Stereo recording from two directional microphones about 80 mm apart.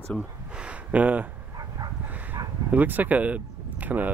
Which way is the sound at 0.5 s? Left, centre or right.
Centre.